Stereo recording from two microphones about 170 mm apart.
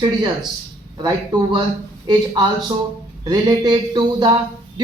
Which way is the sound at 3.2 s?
25° right (ahead or behind).